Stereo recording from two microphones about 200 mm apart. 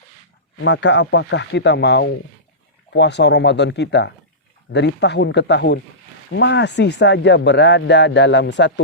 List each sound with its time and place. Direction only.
0.6 s speech: 60° left (ahead or behind)